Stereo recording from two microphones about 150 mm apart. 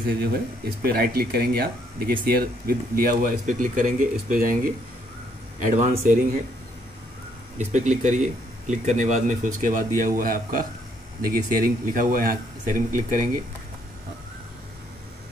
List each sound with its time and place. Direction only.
0.8 s speech: 90° right; by 6.1 s 60° right (ahead or behind)
7.5 s speech: 55° right (ahead or behind)